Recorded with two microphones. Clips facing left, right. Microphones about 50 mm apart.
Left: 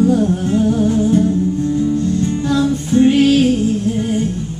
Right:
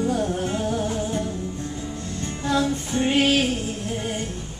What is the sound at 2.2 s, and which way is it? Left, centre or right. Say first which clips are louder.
Music: left 7 dB; centre.